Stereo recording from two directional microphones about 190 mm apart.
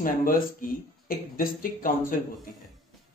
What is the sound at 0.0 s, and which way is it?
Speech, 45° left (ahead or behind).